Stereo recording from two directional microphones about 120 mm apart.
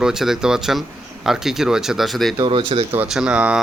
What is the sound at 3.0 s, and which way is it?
Speech, 5° right (ahead or behind).